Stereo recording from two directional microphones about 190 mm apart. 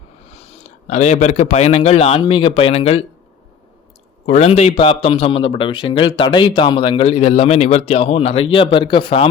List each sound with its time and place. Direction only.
0.3 s a sound: 30° left (ahead or behind)
0.9 s a man's voice: 35° left (ahead or behind)
4.3 s a man's voice: 35° left (ahead or behind)